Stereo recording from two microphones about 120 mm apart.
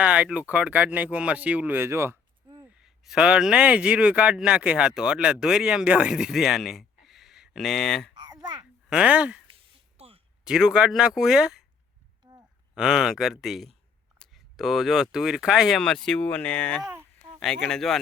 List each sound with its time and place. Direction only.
0.0 s speech: 10° right (ahead or behind)
2.7 s speech: 5° right (ahead or behind)
8.9 s speech: 10° right (ahead or behind)
9.6 s a sound: 55° right (ahead or behind)
10.4 s speech: 5° right (ahead or behind)
12.7 s speech: 5° right (ahead or behind)